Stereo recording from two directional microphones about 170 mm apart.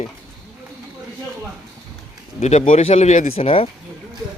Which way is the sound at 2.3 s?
40° left (ahead or behind).